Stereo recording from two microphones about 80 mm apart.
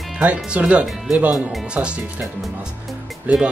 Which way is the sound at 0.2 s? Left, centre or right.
Centre.